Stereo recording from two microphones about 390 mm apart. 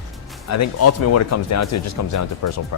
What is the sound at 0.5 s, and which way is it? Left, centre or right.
Speech, left.